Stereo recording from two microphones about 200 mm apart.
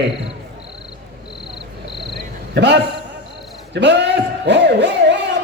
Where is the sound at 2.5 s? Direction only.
60° right (ahead or behind).